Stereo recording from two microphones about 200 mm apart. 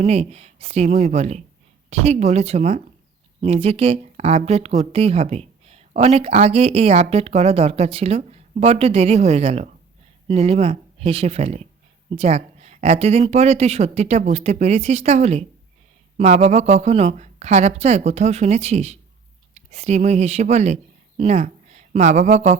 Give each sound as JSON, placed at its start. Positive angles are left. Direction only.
{"t": 0.0, "sound": "a woman's voice", "side_deg": -30}